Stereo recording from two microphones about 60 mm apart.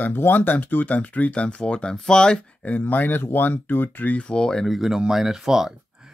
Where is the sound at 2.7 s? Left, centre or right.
Left; by 4.7 s centre.